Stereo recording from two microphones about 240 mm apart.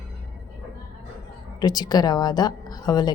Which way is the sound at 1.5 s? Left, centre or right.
Centre.